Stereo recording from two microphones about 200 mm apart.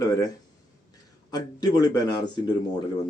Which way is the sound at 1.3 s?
20° left (ahead or behind).